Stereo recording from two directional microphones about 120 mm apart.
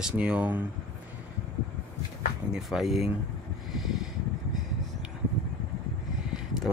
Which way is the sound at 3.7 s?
Centre (ahead or behind).